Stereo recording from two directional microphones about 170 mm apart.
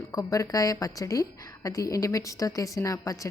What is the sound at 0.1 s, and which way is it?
A woman's voice, 20° left (ahead or behind).